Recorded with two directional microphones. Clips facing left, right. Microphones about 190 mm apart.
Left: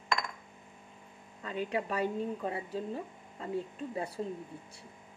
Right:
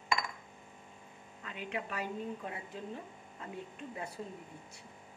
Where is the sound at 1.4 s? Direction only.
35° left (ahead or behind).